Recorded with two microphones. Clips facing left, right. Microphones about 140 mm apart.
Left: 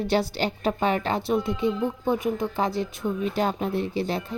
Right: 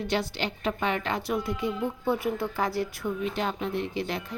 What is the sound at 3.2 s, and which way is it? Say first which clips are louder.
Speech: left 5 dB; 40° left (ahead or behind).